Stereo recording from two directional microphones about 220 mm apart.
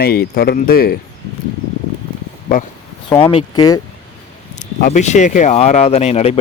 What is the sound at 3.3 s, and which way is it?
Speech, 15° left (ahead or behind).